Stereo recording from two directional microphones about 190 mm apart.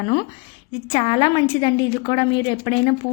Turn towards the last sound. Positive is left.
turn(degrees=25)  # may be behind; listen again after turning